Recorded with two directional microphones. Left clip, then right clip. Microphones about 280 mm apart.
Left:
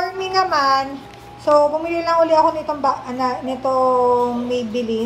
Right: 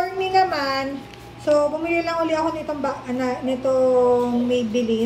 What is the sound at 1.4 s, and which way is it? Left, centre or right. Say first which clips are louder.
A woman's voice: left 4 dB; centre.